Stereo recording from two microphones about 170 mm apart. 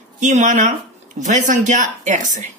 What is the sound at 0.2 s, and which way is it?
Speech, 45° right (ahead or behind).